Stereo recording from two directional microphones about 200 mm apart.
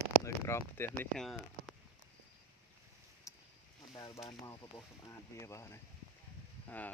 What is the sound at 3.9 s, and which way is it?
Speech, 20° left (ahead or behind).